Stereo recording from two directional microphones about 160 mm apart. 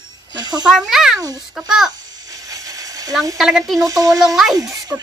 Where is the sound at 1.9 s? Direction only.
25° right (ahead or behind).